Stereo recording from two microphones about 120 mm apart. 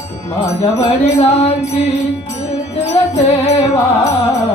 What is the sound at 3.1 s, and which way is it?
Mantra, 65° left (ahead or behind).